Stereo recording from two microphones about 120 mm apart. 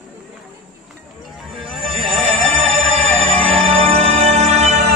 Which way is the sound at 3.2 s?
45° right (ahead or behind).